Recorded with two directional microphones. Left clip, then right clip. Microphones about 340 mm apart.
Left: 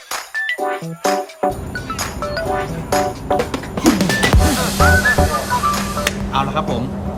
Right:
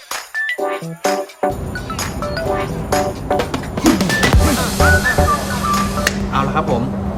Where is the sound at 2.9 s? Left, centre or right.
Centre.